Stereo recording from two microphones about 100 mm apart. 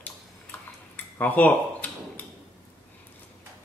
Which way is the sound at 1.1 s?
15° left (ahead or behind).